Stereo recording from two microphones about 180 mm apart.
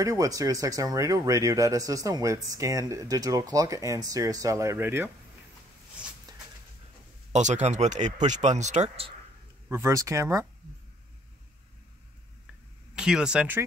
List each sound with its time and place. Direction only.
0.0 s speech: 20° right (ahead or behind)
7.3 s speech: 40° right (ahead or behind)
9.7 s speech: 15° right (ahead or behind)
12.9 s speech: 5° right (ahead or behind)